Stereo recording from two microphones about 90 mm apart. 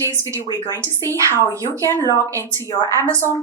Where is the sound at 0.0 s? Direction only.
30° left (ahead or behind).